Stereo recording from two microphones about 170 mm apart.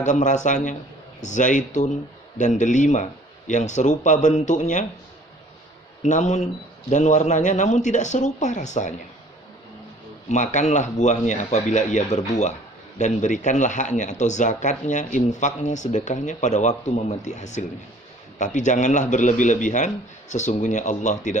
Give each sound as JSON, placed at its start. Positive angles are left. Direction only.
{"t": 0.0, "sound": "speech", "side_deg": 45}
{"t": 6.0, "sound": "speech", "side_deg": 45}
{"t": 10.2, "sound": "speech", "side_deg": 45}